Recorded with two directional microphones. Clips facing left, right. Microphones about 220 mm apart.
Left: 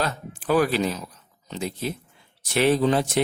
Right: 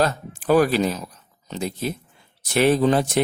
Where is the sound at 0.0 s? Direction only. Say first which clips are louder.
Right 6 dB; 45° right (ahead or behind).